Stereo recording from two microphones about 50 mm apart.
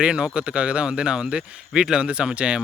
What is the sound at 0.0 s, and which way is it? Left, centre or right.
Speech, centre.